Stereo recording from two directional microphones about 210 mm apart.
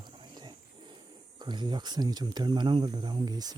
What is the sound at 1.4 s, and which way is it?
Speech, 20° right (ahead or behind).